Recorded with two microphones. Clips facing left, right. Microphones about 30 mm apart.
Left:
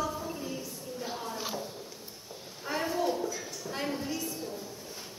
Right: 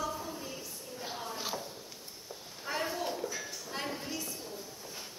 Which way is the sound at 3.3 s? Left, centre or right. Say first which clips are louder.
Left 1 dB; centre.